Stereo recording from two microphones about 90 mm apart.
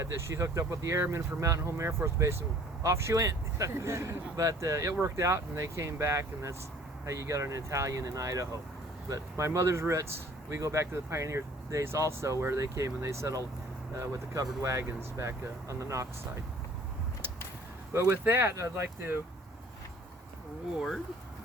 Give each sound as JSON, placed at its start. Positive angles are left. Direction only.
{"t": 0.0, "sound": "speech", "side_deg": -30}
{"t": 17.9, "sound": "speech", "side_deg": -30}